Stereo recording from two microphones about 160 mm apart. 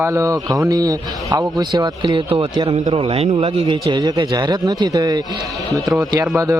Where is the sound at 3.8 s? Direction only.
25° right (ahead or behind).